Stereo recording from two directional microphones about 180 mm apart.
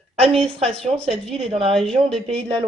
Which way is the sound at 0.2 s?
5° left (ahead or behind).